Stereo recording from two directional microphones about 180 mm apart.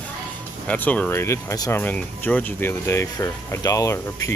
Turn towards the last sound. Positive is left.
turn(degrees=15)  # may be behind; listen again after turning